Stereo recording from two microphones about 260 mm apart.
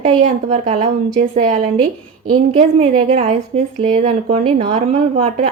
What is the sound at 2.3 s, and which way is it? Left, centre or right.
A woman's voice, right.